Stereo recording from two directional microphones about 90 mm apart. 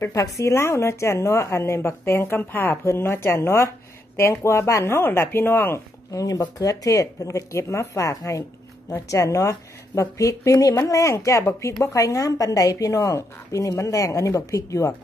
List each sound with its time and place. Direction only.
0.0 s speech: 35° left (ahead or behind)
6.1 s speech: 40° left (ahead or behind)